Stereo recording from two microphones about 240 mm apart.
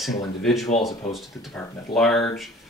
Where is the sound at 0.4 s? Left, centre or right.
Centre.